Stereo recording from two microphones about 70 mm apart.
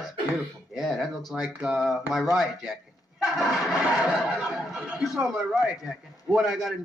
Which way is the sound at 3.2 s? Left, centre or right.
Centre.